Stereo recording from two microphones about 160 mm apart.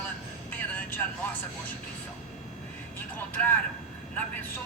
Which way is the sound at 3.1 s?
10° left (ahead or behind).